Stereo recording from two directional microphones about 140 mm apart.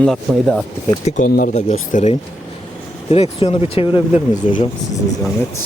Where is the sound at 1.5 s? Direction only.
55° left (ahead or behind).